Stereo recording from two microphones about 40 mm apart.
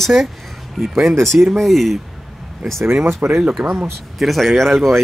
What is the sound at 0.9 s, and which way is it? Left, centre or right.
Speech, right.